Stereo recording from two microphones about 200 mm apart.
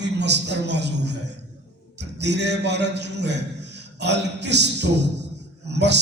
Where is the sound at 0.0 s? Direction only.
60° right (ahead or behind).